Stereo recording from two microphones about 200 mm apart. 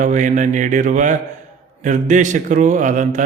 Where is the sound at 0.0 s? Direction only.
40° right (ahead or behind).